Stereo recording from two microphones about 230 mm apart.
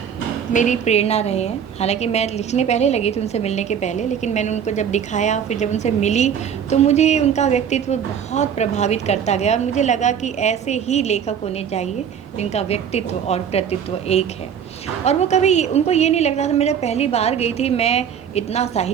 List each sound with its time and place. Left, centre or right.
0.5 s a woman's voice: left